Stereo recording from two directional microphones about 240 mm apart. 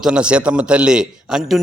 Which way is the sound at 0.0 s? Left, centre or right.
Centre.